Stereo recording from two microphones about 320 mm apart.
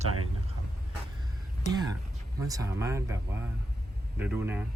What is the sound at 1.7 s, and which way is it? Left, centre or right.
Speech, centre.